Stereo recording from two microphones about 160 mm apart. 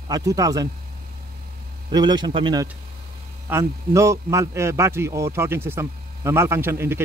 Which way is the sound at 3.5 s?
15° right (ahead or behind).